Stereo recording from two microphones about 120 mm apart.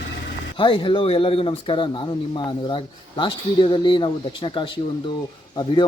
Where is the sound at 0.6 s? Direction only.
45° left (ahead or behind).